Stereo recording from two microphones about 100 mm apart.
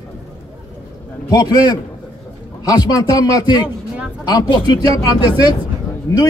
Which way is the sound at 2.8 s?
40° left (ahead or behind).